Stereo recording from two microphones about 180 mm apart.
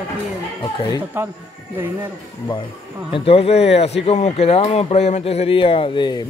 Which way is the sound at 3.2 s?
35° left (ahead or behind).